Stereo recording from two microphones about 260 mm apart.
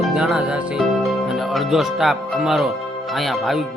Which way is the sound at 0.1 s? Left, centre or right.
Centre.